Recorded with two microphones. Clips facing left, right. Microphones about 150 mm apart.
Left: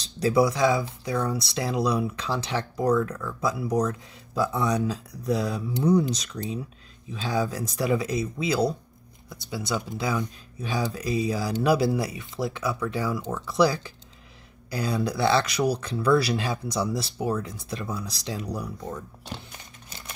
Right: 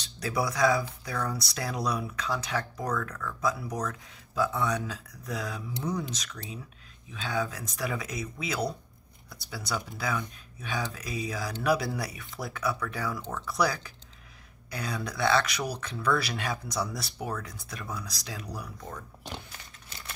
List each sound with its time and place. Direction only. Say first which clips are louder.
0.0 s speech: left 9 dB; 30° left (ahead or behind)